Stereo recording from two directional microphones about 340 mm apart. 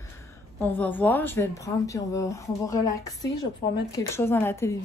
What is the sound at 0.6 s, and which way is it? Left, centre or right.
Speech, centre.